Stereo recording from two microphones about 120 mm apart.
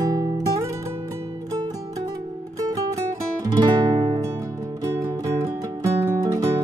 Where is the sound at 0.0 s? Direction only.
30° right (ahead or behind).